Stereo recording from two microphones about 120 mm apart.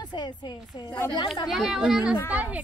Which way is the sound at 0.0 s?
40° left (ahead or behind).